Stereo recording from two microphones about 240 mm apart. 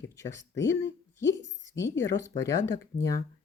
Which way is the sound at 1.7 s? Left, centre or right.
Left.